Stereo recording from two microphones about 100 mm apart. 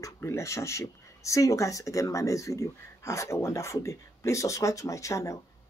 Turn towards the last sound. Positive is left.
turn(degrees=30)  # may be behind; listen again after turning